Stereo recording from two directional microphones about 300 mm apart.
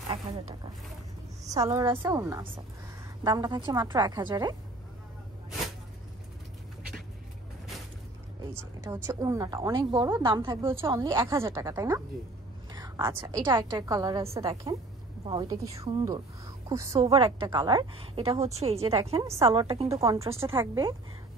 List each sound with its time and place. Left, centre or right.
1.4 s a woman's voice: centre
8.4 s a woman's voice: centre